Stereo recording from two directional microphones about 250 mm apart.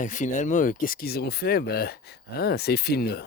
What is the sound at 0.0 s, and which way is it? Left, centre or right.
Speech, left.